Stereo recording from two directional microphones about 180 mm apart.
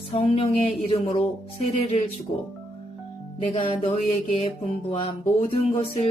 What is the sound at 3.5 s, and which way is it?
Speech, 35° left (ahead or behind).